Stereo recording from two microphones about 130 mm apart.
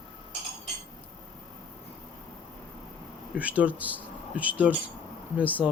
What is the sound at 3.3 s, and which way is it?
Speech, 10° right (ahead or behind).